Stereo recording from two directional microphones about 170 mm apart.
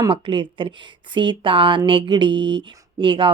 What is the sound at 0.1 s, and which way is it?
Speech, 30° right (ahead or behind).